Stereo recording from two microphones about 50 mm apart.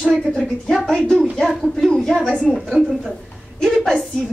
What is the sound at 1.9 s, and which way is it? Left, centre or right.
Speech, centre.